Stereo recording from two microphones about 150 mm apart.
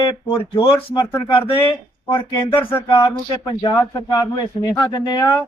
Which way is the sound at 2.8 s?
30° left (ahead or behind).